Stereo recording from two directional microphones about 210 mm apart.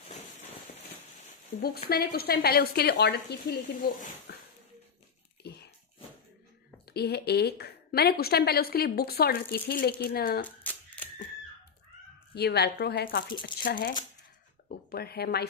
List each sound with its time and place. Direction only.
1.6 s a woman's voice: 45° left (ahead or behind)
6.9 s a woman's voice: 50° left (ahead or behind)
10.6 s a sound: 5° left (ahead or behind)
12.4 s a woman's voice: 50° left (ahead or behind)